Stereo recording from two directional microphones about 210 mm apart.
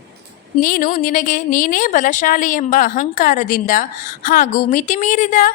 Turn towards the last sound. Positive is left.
turn(degrees=35)  # may be behind; listen again after turning